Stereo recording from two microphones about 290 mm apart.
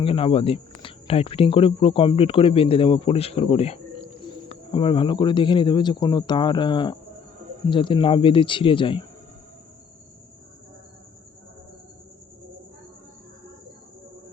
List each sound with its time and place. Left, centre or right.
0.0 s speech: centre